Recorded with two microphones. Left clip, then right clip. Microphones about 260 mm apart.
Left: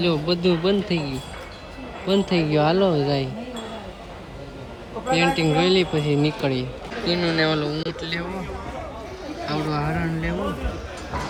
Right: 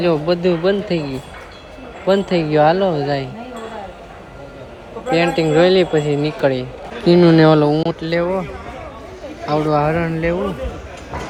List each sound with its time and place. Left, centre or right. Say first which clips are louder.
0.0 s speech: right 6 dB; centre
5.1 s speech: right 6 dB; centre
7.0 s speech: right 11 dB; centre
9.5 s speech: right 10 dB; centre